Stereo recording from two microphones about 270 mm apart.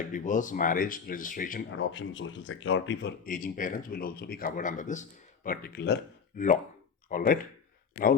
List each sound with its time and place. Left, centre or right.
0.1 s speech: left
1.7 s speech: left